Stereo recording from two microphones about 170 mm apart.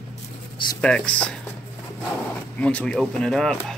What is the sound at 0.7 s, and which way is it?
Speech, 5° left (ahead or behind).